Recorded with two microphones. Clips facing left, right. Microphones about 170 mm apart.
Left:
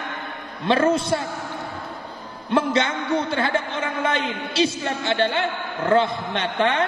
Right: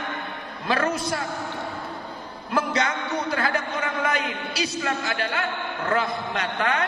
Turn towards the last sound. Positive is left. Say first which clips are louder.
# left 4 dB
turn(degrees=25)  # may be behind; listen again after turning